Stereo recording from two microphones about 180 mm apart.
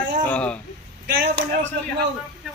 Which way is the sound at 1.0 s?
65° right (ahead or behind).